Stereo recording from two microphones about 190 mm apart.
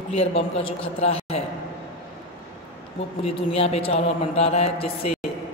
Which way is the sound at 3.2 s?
30° left (ahead or behind).